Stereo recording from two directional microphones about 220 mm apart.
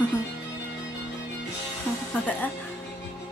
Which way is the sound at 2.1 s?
5° left (ahead or behind).